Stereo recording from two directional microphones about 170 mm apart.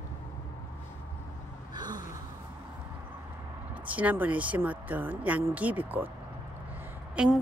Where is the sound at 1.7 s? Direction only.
25° right (ahead or behind).